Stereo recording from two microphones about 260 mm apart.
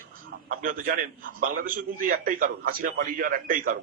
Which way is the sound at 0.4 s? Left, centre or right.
Right.